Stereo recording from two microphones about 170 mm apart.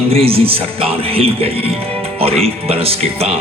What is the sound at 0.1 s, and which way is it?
Speech, 35° right (ahead or behind).